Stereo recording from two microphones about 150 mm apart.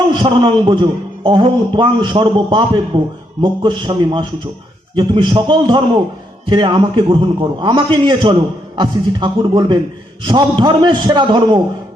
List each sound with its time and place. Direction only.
0.1 s a man's voice: 30° right (ahead or behind)